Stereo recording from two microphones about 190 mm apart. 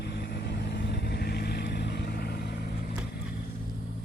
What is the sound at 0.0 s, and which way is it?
Vehicle, 60° left (ahead or behind).